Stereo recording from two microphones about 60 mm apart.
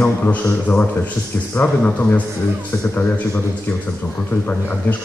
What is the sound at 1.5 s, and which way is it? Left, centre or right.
Speech, left.